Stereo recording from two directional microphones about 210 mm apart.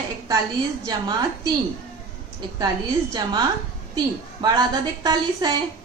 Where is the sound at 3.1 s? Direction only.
20° right (ahead or behind).